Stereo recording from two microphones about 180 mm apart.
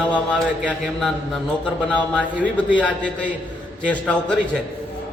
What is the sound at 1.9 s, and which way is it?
A man's voice, 5° left (ahead or behind).